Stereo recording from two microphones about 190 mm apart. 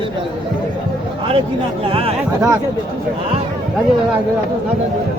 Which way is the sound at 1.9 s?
30° right (ahead or behind).